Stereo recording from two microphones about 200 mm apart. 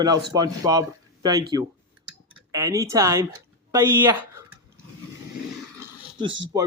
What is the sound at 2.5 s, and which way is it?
Speech, 15° right (ahead or behind).